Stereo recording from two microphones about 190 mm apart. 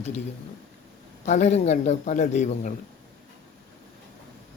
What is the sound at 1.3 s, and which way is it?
Speech, 35° left (ahead or behind).